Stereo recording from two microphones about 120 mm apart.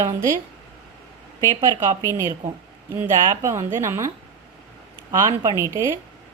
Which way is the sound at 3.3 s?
25° right (ahead or behind).